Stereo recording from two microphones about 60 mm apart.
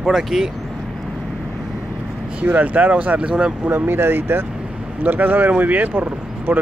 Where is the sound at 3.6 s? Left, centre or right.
Right.